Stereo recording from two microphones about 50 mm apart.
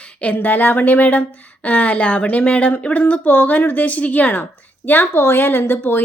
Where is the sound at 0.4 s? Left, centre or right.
Left.